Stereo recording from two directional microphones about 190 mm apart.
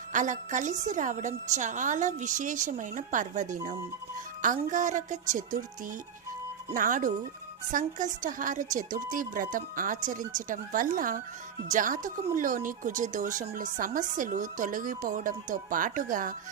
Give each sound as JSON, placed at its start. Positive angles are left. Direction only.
{"t": 0.1, "sound": "a woman's voice", "side_deg": -40}
{"t": 6.7, "sound": "speech", "side_deg": -45}